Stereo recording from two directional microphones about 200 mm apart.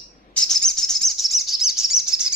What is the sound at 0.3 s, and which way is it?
Bird, 5° left (ahead or behind).